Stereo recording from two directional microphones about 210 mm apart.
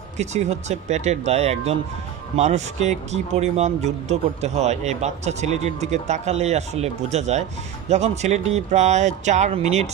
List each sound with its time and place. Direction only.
0.2 s speech: 30° right (ahead or behind)